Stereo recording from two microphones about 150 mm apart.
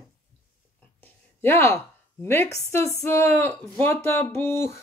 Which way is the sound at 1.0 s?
15° left (ahead or behind).